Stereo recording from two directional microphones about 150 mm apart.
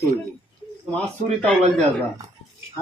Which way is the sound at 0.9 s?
5° left (ahead or behind).